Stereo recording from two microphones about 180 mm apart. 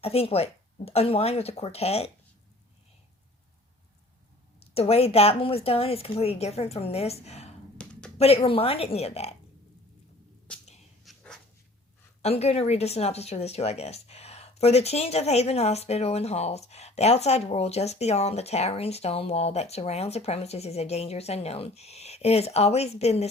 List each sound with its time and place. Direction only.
0.0 s speech: 35° left (ahead or behind)
4.6 s speech: 35° left (ahead or behind)
7.8 s a sound: 5° left (ahead or behind)
8.2 s speech: 35° left (ahead or behind)
11.0 s dog: centre (ahead or behind)
12.2 s speech: 35° left (ahead or behind)